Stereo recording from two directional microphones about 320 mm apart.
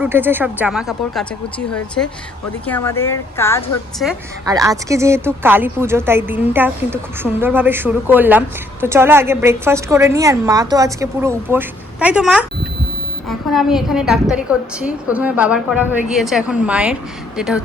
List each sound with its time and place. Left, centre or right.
0.0 s a woman's voice: centre
2.6 s speech: centre
4.0 s a woman's voice: centre